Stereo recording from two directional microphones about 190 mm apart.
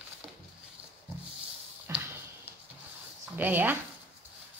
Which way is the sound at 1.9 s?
15° right (ahead or behind).